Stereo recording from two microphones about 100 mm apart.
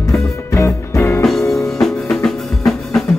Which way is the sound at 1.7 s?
5° left (ahead or behind).